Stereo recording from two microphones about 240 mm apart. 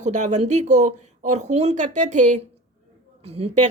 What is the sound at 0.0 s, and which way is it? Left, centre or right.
Speech, right.